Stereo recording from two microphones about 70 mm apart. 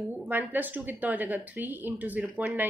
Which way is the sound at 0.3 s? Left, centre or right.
Right.